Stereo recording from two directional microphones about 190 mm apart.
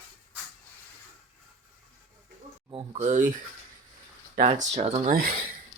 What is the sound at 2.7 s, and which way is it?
Speech, 35° right (ahead or behind).